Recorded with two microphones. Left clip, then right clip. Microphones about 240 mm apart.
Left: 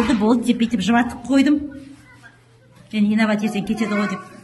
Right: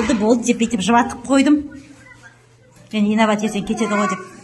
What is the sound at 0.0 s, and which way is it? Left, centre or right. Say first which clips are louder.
A woman's voice: right 2 dB; centre.